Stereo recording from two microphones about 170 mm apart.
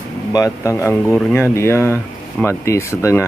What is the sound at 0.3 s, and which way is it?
Speech, 20° left (ahead or behind).